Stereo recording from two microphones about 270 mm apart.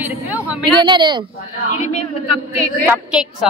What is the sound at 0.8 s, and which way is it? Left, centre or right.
Speech, centre.